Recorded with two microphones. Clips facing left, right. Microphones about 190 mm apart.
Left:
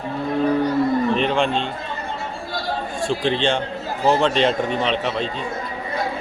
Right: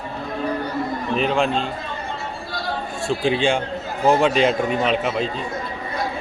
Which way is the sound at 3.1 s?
10° right (ahead or behind).